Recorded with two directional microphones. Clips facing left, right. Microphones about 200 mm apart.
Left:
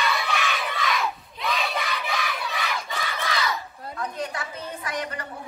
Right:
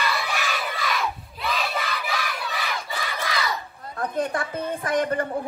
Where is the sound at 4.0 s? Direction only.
55° right (ahead or behind).